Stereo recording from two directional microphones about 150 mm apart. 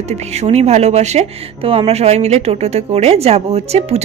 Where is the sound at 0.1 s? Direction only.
45° right (ahead or behind).